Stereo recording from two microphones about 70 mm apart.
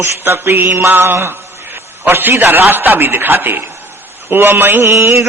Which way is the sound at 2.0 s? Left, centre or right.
Right.